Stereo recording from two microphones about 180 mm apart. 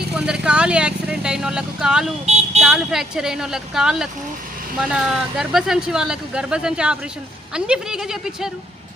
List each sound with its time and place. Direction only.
0.2 s speech: 5° right (ahead or behind)
2.2 s vehicle: 35° right (ahead or behind)
2.6 s speech: centre (ahead or behind)